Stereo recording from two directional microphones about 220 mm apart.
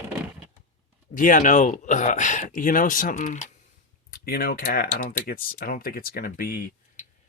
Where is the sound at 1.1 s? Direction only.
35° left (ahead or behind).